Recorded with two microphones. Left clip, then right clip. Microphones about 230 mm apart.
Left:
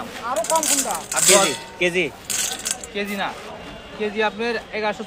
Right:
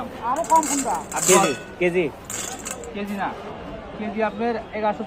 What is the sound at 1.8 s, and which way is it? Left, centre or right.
Speech, centre.